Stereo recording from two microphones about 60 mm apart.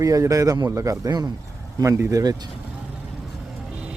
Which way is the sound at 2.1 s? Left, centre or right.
Right.